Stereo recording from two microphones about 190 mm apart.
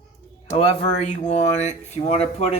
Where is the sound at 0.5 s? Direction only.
30° left (ahead or behind).